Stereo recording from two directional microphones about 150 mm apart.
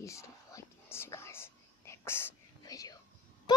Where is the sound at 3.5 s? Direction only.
30° left (ahead or behind).